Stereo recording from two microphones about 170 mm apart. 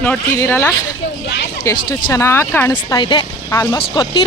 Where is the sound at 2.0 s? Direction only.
15° left (ahead or behind).